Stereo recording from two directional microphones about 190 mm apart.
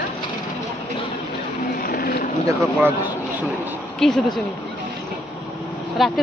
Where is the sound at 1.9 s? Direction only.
55° left (ahead or behind).